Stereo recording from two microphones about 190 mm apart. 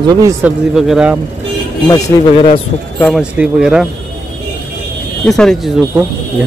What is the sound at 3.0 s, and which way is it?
Speech, 5° left (ahead or behind).